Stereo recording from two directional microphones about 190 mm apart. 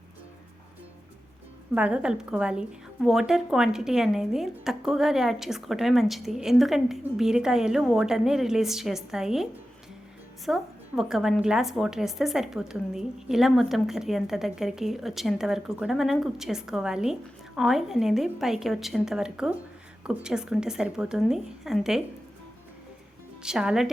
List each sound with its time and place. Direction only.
1.7 s a woman's voice: 5° right (ahead or behind)
23.4 s a woman's voice: 5° right (ahead or behind)